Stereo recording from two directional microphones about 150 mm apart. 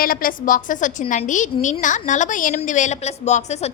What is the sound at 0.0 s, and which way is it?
A woman's voice, 70° left (ahead or behind).